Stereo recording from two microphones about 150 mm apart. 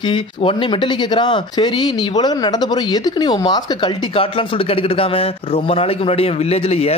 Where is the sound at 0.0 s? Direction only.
35° left (ahead or behind).